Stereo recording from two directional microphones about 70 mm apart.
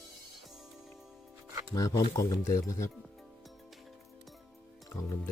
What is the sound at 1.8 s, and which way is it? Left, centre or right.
Speech, left.